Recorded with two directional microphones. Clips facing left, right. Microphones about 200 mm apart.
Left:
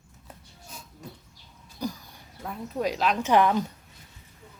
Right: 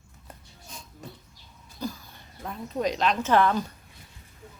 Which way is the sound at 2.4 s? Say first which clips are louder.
Right 1 dB; 5° left (ahead or behind).